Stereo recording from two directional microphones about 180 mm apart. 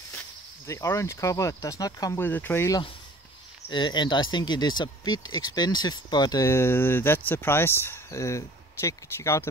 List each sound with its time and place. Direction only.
0.7 s speech: 15° left (ahead or behind)
3.7 s speech: 25° left (ahead or behind)